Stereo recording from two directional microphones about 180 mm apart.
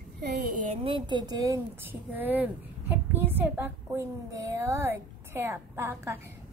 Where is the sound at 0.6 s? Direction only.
30° right (ahead or behind).